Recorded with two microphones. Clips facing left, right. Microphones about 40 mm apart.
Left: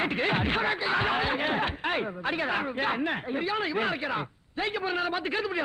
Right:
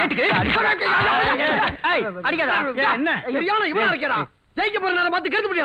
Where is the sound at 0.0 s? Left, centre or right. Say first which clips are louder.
Right 7 dB; right.